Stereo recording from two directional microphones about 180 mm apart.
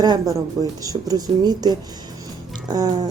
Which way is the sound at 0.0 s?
20° right (ahead or behind).